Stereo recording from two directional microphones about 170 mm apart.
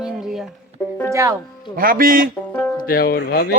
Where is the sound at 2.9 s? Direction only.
65° left (ahead or behind).